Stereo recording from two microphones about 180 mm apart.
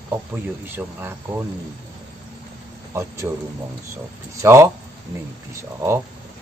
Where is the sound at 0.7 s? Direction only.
10° right (ahead or behind).